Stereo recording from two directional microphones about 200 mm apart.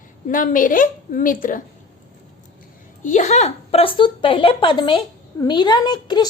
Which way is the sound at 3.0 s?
40° left (ahead or behind).